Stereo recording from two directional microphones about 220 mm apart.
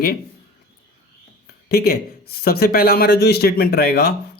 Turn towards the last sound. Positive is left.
turn(degrees=45)  # may be behind; listen again after turning